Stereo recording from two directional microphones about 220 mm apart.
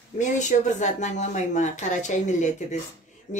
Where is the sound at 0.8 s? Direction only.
30° left (ahead or behind).